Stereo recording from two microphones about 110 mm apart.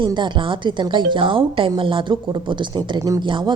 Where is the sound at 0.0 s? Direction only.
45° right (ahead or behind).